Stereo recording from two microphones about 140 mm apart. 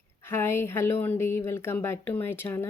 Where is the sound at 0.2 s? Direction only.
15° left (ahead or behind).